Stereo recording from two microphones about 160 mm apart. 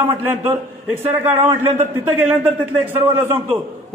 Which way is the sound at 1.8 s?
15° right (ahead or behind).